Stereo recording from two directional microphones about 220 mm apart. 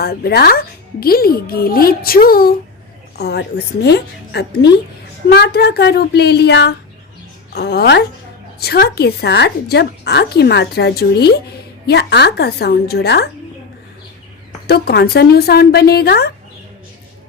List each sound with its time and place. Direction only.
0.0 s a woman's voice: 45° left (ahead or behind)
14.7 s a woman's voice: 45° left (ahead or behind)